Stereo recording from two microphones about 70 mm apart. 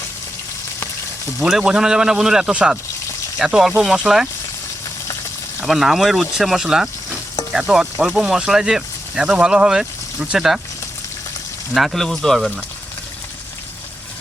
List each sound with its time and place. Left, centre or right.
1.5 s speech: centre
5.6 s speech: centre
11.7 s speech: centre